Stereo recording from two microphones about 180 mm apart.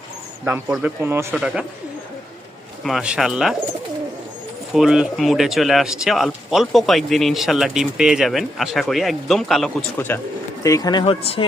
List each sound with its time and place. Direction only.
0.4 s speech: 10° right (ahead or behind)
2.8 s speech: 5° right (ahead or behind)
4.7 s speech: centre (ahead or behind)
10.1 s speech: 10° left (ahead or behind); by 11.4 s 30° left (ahead or behind)